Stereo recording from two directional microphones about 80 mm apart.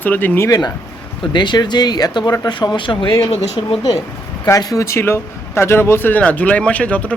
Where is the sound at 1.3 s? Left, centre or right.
Left.